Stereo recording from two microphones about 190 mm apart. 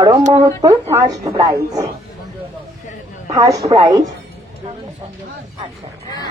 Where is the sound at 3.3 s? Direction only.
15° right (ahead or behind).